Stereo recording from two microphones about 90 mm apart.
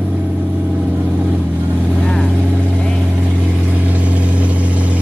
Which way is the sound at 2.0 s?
10° left (ahead or behind).